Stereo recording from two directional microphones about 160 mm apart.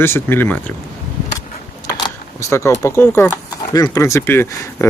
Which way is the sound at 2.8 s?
15° left (ahead or behind).